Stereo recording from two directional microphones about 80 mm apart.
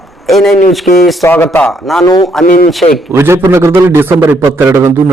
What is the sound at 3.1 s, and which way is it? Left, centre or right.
A man's voice, right.